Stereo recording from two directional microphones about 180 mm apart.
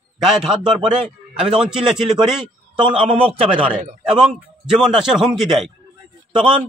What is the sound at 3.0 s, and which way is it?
Speech, 30° right (ahead or behind).